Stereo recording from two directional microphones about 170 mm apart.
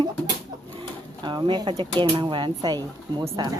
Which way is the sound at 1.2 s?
25° right (ahead or behind).